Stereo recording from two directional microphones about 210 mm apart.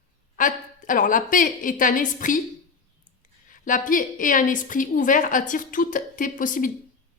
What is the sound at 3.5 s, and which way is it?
A woman's voice, 40° left (ahead or behind).